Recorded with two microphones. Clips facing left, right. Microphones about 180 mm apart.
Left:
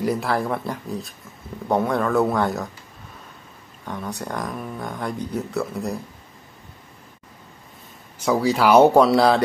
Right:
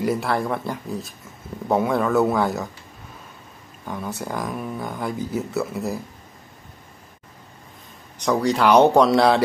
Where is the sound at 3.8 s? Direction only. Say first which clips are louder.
Right 1 dB; 5° right (ahead or behind).